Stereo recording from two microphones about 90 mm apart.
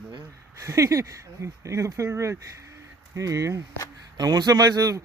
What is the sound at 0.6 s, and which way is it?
Speech, 35° right (ahead or behind).